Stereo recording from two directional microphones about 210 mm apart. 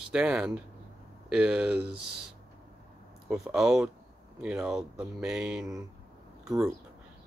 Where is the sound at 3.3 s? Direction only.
5° right (ahead or behind).